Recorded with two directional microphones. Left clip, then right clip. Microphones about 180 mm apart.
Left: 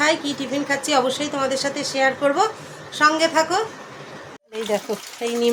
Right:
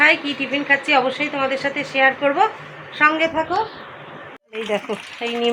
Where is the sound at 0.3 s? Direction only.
20° left (ahead or behind).